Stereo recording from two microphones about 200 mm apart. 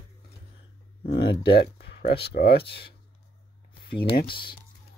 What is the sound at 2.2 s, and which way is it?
Speech, 50° left (ahead or behind).